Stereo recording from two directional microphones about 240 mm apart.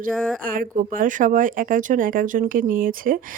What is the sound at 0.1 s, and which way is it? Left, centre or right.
Speech, centre.